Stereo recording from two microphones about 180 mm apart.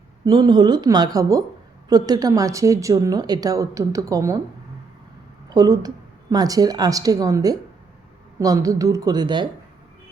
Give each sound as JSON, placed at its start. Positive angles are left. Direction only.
{"t": 0.3, "sound": "a woman's voice", "side_deg": -25}
{"t": 5.5, "sound": "a woman's voice", "side_deg": -20}